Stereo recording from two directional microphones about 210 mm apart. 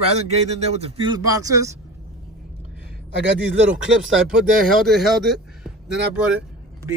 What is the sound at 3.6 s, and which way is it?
Speech, 5° right (ahead or behind).